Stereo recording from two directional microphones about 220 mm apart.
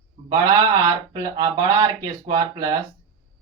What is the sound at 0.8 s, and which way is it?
Speech, 20° right (ahead or behind).